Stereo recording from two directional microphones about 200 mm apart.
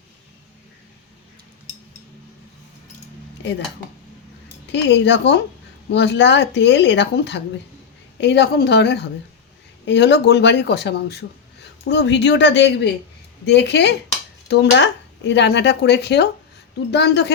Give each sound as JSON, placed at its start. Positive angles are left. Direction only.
{"t": 4.7, "sound": "speech", "side_deg": 60}